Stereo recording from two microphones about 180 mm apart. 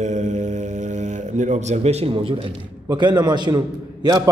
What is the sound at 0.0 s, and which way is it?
Speech, 40° right (ahead or behind).